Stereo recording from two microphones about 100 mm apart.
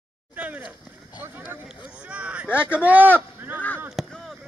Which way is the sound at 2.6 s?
15° right (ahead or behind).